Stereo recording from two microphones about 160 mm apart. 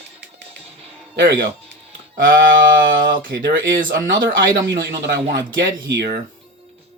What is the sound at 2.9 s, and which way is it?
Speech, 60° right (ahead or behind).